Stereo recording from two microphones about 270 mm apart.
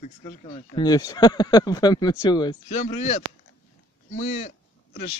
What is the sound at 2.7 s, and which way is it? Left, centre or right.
Speech, left.